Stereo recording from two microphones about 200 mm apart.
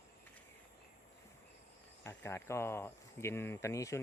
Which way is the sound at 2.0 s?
10° left (ahead or behind).